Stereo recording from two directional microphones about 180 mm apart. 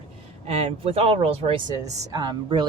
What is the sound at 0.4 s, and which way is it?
Speech, 30° right (ahead or behind).